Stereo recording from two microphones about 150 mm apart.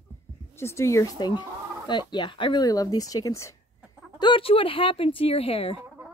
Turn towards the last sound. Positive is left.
turn(degrees=40)  # may be behind; listen again after turning